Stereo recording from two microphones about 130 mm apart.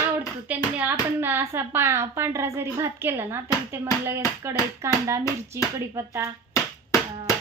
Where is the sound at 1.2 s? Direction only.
15° right (ahead or behind).